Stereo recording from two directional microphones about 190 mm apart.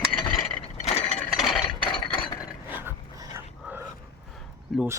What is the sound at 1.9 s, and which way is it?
Mechanisms, 25° left (ahead or behind).